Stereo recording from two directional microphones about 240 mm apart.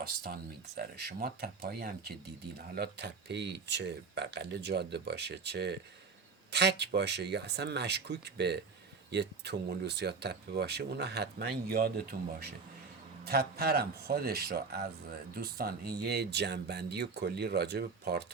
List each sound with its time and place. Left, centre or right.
0.0 s speech: right